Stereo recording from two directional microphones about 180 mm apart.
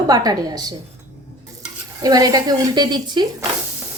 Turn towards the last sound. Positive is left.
turn(degrees=-25)  # may be behind; listen again after turning